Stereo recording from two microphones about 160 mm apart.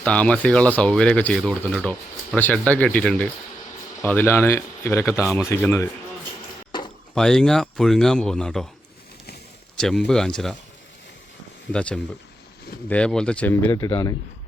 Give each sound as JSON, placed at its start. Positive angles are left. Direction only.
{"t": 0.0, "sound": "speech", "side_deg": 10}
{"t": 6.7, "sound": "a sound", "side_deg": 30}
{"t": 7.1, "sound": "speech", "side_deg": 5}
{"t": 9.7, "sound": "speech", "side_deg": 5}
{"t": 11.7, "sound": "speech", "side_deg": 5}